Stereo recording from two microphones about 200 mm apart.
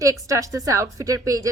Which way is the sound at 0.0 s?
15° right (ahead or behind).